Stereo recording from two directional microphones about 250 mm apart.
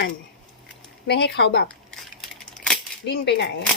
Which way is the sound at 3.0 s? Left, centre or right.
Left.